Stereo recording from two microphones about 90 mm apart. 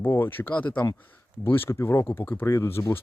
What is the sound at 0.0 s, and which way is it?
Speech, 25° left (ahead or behind).